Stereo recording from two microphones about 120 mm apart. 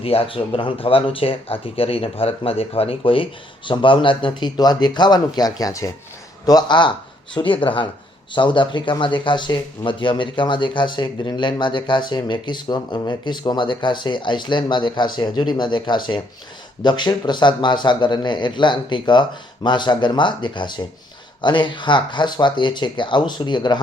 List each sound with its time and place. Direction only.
0.0 s speech: 50° left (ahead or behind)